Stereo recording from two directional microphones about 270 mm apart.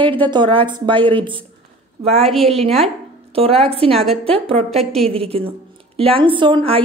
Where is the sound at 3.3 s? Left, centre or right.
Right.